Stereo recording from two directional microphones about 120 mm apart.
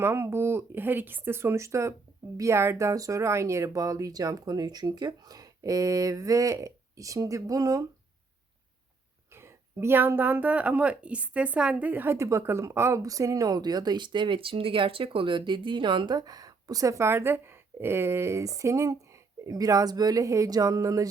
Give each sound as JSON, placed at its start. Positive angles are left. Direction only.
{"t": 0.0, "sound": "a woman's voice", "side_deg": -20}
{"t": 9.3, "sound": "a woman's voice", "side_deg": -20}